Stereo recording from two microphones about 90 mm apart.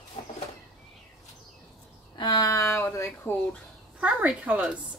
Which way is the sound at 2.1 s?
45° left (ahead or behind).